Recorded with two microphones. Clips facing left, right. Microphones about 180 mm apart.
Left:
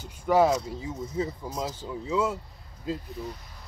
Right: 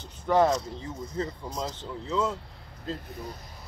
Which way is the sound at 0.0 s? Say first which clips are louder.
Left 1 dB; 10° left (ahead or behind).